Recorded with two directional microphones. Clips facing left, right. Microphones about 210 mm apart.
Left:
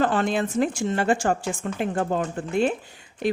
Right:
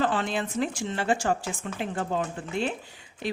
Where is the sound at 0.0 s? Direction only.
50° left (ahead or behind).